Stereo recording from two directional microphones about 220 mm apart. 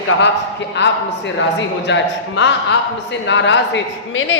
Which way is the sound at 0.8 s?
55° left (ahead or behind).